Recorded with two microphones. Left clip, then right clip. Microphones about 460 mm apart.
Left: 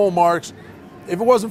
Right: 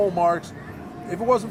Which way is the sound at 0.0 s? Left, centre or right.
Left.